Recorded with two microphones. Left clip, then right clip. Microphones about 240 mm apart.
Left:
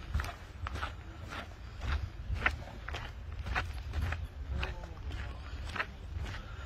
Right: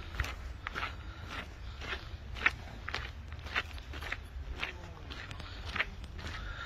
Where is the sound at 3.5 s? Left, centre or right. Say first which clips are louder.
Right 1 dB; left.